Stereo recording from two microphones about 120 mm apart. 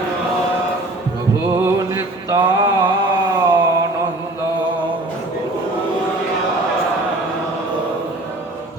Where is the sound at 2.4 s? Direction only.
40° right (ahead or behind).